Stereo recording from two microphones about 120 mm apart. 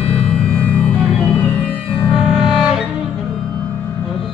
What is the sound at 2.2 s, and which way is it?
Music, 5° right (ahead or behind).